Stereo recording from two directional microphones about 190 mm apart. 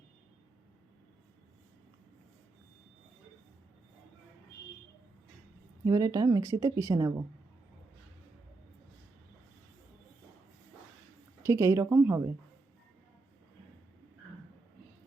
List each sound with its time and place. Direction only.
5.8 s speech: 20° right (ahead or behind)
11.4 s speech: 15° right (ahead or behind)